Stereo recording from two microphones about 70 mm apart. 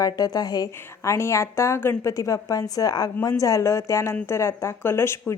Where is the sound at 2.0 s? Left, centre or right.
Left.